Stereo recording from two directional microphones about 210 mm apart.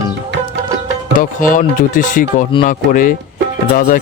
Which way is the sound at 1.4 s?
40° left (ahead or behind).